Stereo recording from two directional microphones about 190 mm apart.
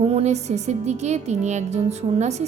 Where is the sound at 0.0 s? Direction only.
35° right (ahead or behind).